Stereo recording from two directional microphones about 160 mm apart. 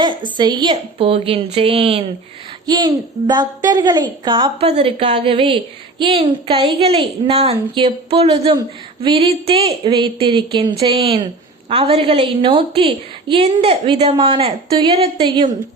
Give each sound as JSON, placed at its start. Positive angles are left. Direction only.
{"t": 0.3, "sound": "a woman's voice", "side_deg": -30}
{"t": 2.6, "sound": "a woman's voice", "side_deg": -25}